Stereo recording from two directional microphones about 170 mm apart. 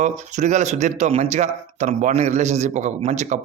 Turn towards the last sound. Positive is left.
turn(degrees=-40)  # may be behind; listen again after turning